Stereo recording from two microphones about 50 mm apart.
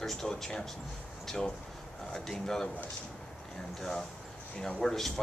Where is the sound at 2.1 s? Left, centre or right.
Centre.